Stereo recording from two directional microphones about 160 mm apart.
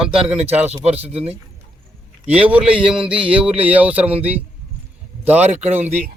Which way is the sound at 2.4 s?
10° right (ahead or behind).